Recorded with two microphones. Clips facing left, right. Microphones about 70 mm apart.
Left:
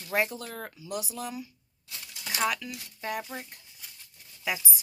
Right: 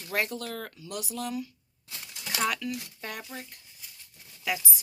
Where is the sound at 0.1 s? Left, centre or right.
Centre.